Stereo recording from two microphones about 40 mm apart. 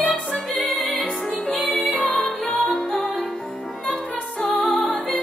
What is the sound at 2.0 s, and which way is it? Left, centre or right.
Music, left.